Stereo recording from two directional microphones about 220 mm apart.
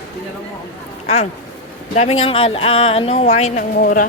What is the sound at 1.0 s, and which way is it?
Speech, 30° left (ahead or behind).